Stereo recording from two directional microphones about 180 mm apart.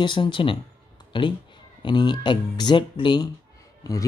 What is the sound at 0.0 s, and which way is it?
Speech, 25° left (ahead or behind).